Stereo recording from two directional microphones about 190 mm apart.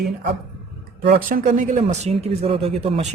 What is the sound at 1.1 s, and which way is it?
A man's voice, 50° right (ahead or behind).